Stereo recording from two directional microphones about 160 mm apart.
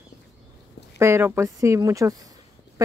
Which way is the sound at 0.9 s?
15° right (ahead or behind).